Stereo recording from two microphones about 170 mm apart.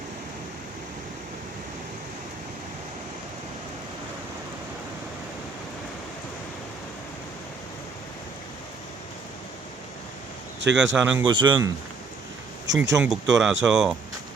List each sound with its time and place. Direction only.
10.8 s speech: 5° right (ahead or behind)
11.3 s speech: 25° right (ahead or behind)
12.6 s speech: 90° right
13.0 s speech: 5° right (ahead or behind)